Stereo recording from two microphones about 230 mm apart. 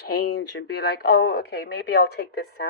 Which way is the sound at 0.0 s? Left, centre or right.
Left.